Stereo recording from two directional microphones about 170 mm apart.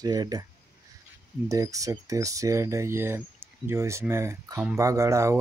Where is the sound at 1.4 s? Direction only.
20° right (ahead or behind).